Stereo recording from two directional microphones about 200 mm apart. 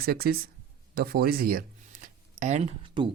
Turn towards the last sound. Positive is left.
turn(degrees=-25)  # may be behind; listen again after turning